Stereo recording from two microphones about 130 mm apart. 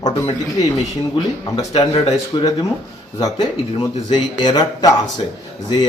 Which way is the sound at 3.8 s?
30° left (ahead or behind).